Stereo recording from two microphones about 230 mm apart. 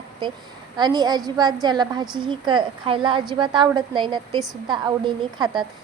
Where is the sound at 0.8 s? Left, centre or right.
Centre.